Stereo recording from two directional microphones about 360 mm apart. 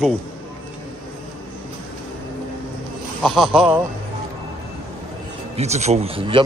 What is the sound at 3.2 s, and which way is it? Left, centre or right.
Speech, centre.